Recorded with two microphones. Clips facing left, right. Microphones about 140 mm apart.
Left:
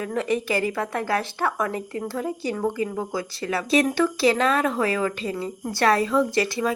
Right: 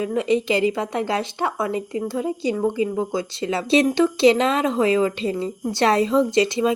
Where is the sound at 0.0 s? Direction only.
15° right (ahead or behind).